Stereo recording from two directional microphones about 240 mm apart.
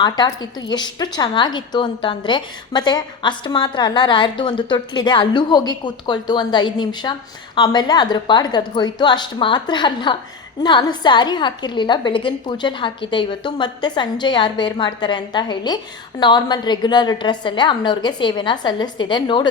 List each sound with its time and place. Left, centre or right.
0.0 s a woman's voice: centre